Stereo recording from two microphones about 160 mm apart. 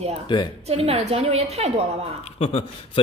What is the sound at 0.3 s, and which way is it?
Speech, 30° left (ahead or behind).